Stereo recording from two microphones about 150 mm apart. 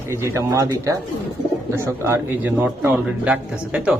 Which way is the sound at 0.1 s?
20° right (ahead or behind).